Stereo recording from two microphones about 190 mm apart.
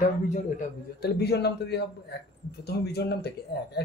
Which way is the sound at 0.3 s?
40° left (ahead or behind).